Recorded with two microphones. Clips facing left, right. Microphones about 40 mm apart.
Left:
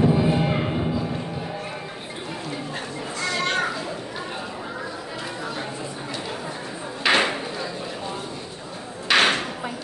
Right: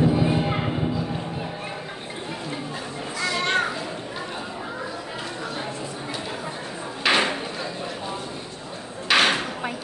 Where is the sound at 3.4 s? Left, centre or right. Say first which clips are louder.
Right 1 dB; right.